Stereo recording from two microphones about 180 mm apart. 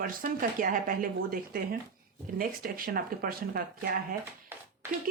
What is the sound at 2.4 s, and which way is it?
Speech, 50° right (ahead or behind).